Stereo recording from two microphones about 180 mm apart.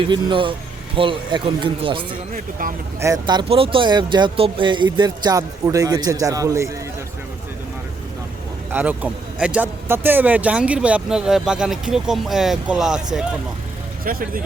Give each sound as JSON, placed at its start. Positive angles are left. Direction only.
{"t": 0.1, "sound": "speech", "side_deg": -25}
{"t": 2.3, "sound": "speech", "side_deg": -50}
{"t": 3.0, "sound": "speech", "side_deg": -20}
{"t": 8.7, "sound": "speech", "side_deg": -10}
{"t": 14.0, "sound": "speech", "side_deg": -50}